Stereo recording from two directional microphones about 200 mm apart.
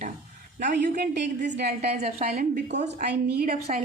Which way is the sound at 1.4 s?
35° right (ahead or behind).